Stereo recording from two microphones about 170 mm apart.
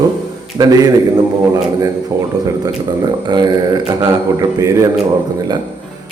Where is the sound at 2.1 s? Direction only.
20° right (ahead or behind).